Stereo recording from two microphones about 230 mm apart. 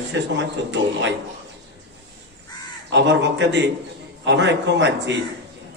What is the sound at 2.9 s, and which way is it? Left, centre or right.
A man's voice, right.